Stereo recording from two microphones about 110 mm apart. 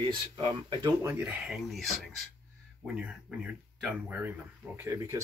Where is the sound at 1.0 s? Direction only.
20° right (ahead or behind).